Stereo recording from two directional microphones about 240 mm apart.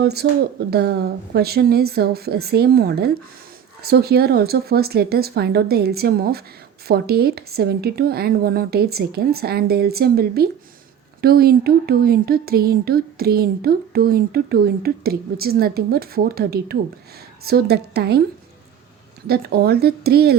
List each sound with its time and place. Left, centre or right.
0.0 s speech: right
19.3 s speech: right